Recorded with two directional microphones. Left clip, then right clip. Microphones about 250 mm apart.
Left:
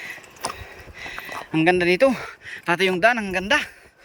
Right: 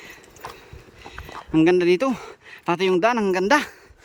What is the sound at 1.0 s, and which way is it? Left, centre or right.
Speech, centre.